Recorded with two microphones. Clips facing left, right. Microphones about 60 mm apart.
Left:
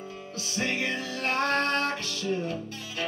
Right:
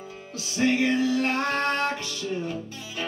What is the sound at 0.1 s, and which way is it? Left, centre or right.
Music, centre.